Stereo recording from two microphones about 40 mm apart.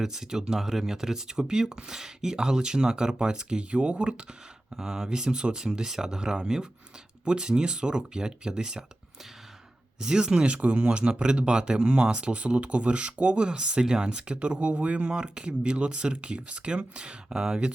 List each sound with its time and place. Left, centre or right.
0.0 s speech: centre
4.7 s speech: centre
10.0 s speech: centre
10.4 s speech: right